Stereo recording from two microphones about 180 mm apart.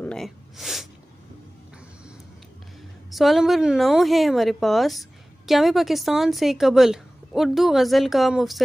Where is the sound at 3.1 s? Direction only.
Centre (ahead or behind).